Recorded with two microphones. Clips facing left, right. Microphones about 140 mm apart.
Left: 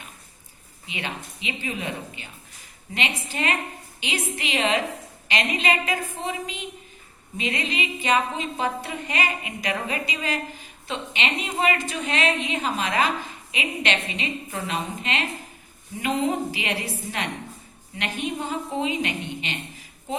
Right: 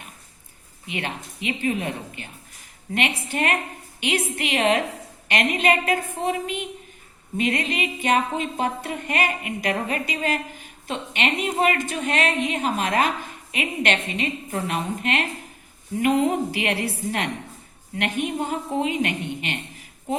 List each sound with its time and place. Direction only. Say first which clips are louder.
0.9 s a woman's voice: right 3 dB; 55° right (ahead or behind)